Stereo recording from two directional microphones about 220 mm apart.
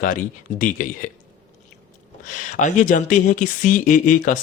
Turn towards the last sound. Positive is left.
turn(degrees=35)  # may be behind; listen again after turning